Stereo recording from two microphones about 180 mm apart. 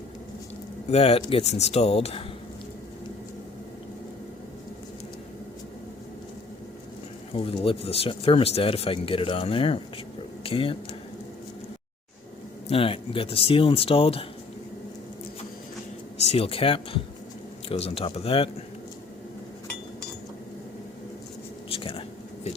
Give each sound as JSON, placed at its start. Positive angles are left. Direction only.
{"t": 0.9, "sound": "speech", "side_deg": 35}
{"t": 7.3, "sound": "speech", "side_deg": 30}
{"t": 12.6, "sound": "speech", "side_deg": 30}
{"t": 16.2, "sound": "speech", "side_deg": 35}
{"t": 21.7, "sound": "a sound", "side_deg": 30}